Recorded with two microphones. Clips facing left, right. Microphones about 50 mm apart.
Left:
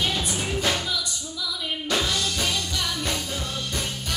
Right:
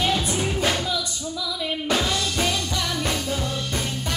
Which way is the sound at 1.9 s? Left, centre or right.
Centre.